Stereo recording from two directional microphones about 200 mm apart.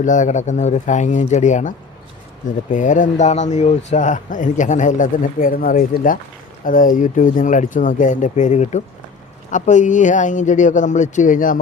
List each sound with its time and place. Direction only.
0.0 s speech: 40° left (ahead or behind)